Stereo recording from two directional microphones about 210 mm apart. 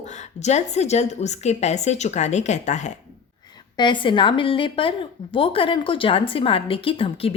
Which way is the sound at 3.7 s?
20° left (ahead or behind).